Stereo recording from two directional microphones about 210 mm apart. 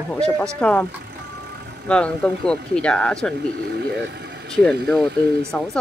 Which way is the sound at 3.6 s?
55° right (ahead or behind).